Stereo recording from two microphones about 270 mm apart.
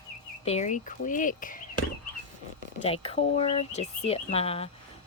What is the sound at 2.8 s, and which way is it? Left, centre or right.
Speech, left.